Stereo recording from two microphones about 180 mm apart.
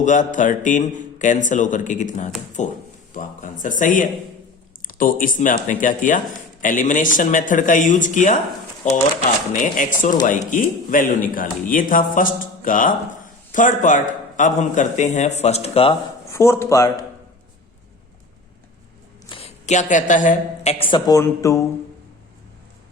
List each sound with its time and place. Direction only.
0.0 s speech: 45° left (ahead or behind)
3.1 s a sound: 45° left (ahead or behind)
4.8 s speech: 50° left (ahead or behind); by 16.0 s 30° left (ahead or behind)
16.3 s speech: 15° left (ahead or behind)
19.3 s a woman's voice: 35° left (ahead or behind)
20.7 s speech: 30° left (ahead or behind)
21.2 s speech: 15° left (ahead or behind)